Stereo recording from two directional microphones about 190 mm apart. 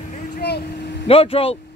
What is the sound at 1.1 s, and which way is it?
Speech, 30° left (ahead or behind).